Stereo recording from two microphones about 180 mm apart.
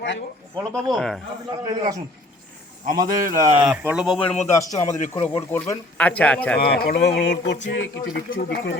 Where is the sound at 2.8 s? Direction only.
50° right (ahead or behind).